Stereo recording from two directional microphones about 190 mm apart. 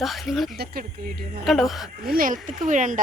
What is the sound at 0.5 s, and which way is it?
Speech, 55° right (ahead or behind).